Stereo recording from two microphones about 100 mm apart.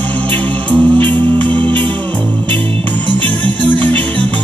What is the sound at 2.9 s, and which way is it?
Music, 15° left (ahead or behind).